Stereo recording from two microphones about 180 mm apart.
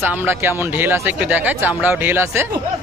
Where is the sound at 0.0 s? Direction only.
10° right (ahead or behind).